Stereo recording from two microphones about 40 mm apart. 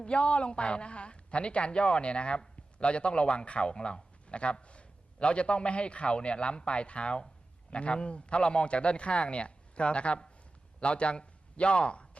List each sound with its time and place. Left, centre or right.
0.0 s a man's voice: left